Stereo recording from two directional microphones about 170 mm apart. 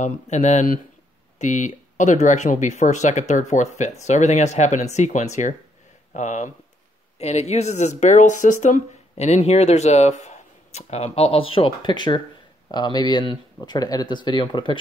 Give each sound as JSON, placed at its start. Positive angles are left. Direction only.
{"t": 0.0, "sound": "speech", "side_deg": 45}